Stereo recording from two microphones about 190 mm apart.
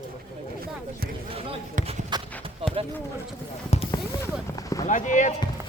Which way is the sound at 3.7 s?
30° left (ahead or behind).